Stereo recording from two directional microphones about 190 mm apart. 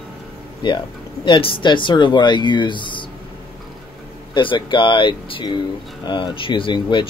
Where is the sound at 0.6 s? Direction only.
25° left (ahead or behind).